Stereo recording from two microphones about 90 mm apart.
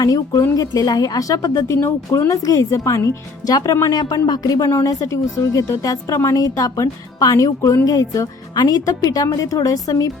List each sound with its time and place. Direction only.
0.0 s a woman's voice: 45° left (ahead or behind)